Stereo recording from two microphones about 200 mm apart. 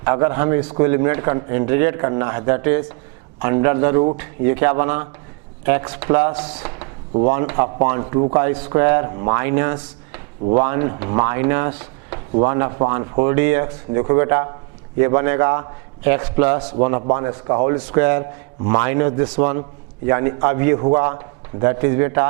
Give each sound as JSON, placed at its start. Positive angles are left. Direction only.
{"t": 0.0, "sound": "a man's voice", "side_deg": -15}